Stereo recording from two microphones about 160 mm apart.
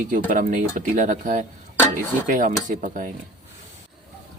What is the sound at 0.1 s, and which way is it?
Speech, 60° right (ahead or behind).